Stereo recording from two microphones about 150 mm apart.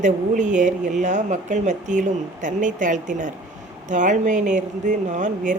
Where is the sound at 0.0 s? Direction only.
55° right (ahead or behind).